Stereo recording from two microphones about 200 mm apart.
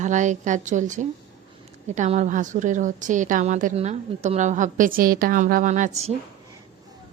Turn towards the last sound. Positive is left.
turn(degrees=-35)  # may be behind; listen again after turning